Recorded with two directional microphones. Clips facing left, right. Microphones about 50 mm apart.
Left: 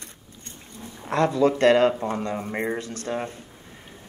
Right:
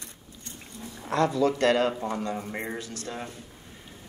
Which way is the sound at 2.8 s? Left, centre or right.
Left.